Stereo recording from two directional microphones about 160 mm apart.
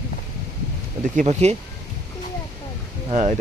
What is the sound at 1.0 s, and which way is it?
Speech, 50° right (ahead or behind).